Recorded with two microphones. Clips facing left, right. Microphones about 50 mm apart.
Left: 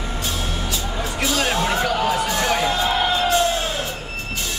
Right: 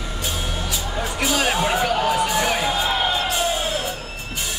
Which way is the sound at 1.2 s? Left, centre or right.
Centre.